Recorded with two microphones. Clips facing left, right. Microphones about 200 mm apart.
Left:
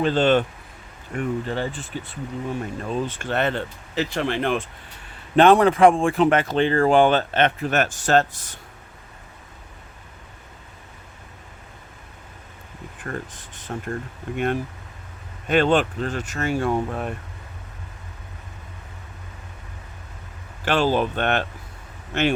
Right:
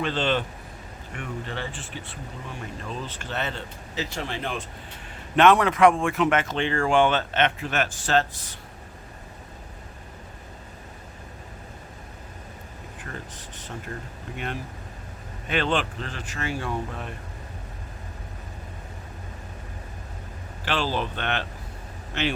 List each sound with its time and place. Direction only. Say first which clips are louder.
0.0 s speech: left 7 dB; 45° left (ahead or behind); by 4.6 s 60° left (ahead or behind)
5.4 s speech: left 4 dB; 30° left (ahead or behind)
13.1 s speech: left 8 dB; 50° left (ahead or behind)
20.7 s speech: left 7 dB; 50° left (ahead or behind)